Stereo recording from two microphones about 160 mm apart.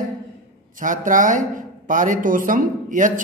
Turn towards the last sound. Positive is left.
turn(degrees=-55)  # may be behind; listen again after turning